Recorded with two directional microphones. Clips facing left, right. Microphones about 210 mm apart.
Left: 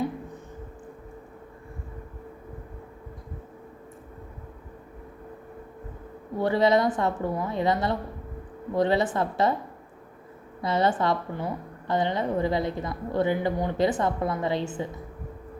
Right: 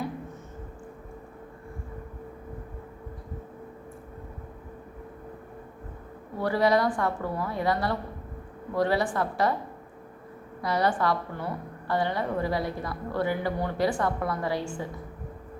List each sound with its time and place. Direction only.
6.4 s a woman's voice: 20° left (ahead or behind)
10.6 s a woman's voice: 25° left (ahead or behind)